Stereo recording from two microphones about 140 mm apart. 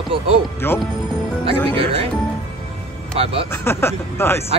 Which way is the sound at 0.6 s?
15° left (ahead or behind).